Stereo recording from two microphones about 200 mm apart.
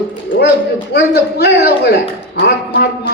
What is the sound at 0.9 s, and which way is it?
A man's voice, 55° left (ahead or behind).